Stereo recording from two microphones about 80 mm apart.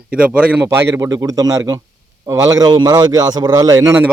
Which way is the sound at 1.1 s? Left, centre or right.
Right.